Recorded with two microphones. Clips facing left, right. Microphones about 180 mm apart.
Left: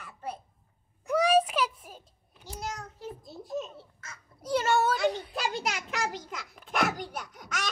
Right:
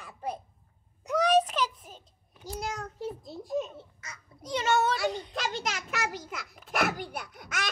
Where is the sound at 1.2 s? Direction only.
10° left (ahead or behind).